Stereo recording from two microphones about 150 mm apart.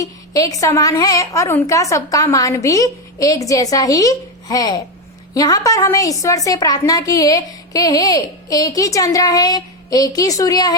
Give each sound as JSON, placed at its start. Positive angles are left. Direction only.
{"t": 0.0, "sound": "a woman's voice", "side_deg": 20}